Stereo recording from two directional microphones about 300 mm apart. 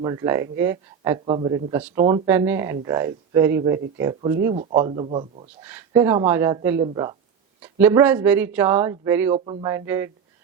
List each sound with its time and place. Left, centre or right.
0.0 s speech: centre
5.6 s speech: centre